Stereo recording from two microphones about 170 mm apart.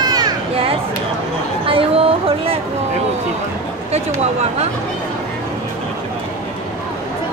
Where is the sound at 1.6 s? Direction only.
35° right (ahead or behind).